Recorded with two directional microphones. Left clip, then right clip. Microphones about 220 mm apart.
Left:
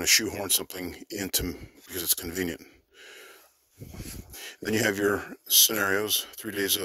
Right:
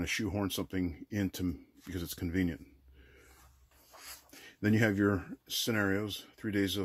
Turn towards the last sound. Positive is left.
turn(degrees=50)  # may be behind; listen again after turning